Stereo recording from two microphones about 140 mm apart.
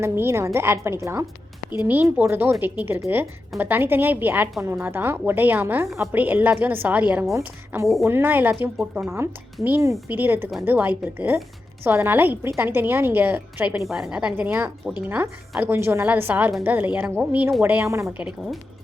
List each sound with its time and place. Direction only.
0.0 s a woman's voice: 20° right (ahead or behind)
7.3 s a woman's voice: 20° right (ahead or behind)
13.8 s a woman's voice: 5° right (ahead or behind); by 18.1 s 20° right (ahead or behind)
18.2 s speech: 5° right (ahead or behind)